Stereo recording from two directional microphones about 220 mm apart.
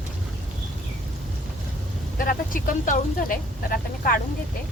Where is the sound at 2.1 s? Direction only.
40° left (ahead or behind).